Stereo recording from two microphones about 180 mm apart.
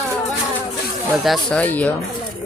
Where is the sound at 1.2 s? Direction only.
Centre (ahead or behind).